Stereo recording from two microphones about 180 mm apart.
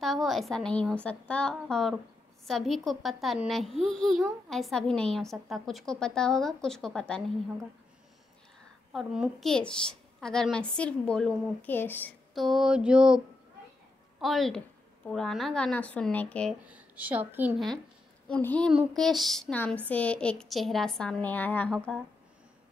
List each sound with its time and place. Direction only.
0.0 s speech: centre (ahead or behind)
8.9 s speech: centre (ahead or behind)
12.4 s speech: centre (ahead or behind)
14.2 s speech: centre (ahead or behind)
16.6 s a woman's voice: 10° right (ahead or behind)
18.3 s a woman's voice: 5° left (ahead or behind)